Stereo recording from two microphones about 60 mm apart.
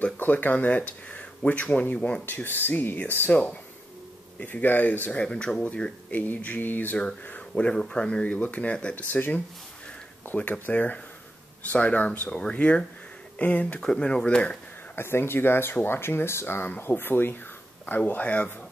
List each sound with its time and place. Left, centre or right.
0.0 s speech: left
2.0 s speech: centre
2.2 s speech: left
4.5 s speech: left
5.2 s speech: centre; by 7.0 s left
7.2 s a sound: left
7.7 s speech: centre
13.7 s speech: centre
15.0 s speech: left